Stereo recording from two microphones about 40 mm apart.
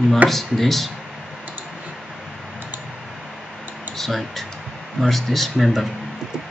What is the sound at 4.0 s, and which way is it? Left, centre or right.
Speech, centre.